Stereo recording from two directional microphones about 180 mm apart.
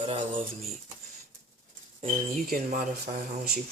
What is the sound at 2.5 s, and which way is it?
Speech, 55° right (ahead or behind).